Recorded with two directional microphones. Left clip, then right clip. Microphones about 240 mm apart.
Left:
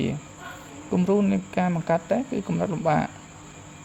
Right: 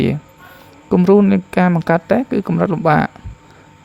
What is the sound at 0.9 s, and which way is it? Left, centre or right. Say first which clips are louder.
Speech: right 11 dB; right.